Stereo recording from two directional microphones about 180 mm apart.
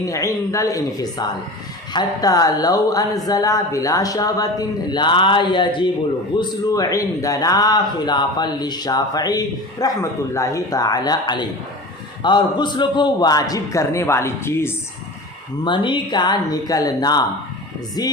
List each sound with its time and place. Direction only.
0.0 s a man's voice: 15° left (ahead or behind)
15.6 s a man's voice: 25° left (ahead or behind)